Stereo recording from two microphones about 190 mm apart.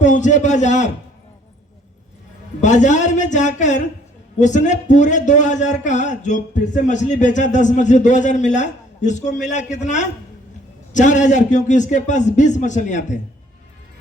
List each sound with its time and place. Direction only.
0.0 s a man's voice: 40° left (ahead or behind)
2.6 s a man's voice: 40° left (ahead or behind)